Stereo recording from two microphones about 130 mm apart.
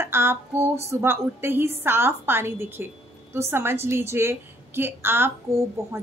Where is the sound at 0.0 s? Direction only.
20° right (ahead or behind).